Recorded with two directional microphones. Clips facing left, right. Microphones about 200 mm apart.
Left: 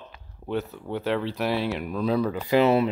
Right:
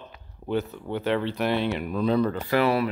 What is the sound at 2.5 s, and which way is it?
Speech, 20° left (ahead or behind).